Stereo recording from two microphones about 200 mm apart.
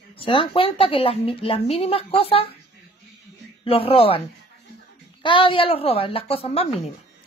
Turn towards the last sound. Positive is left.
turn(degrees=30)  # may be behind; listen again after turning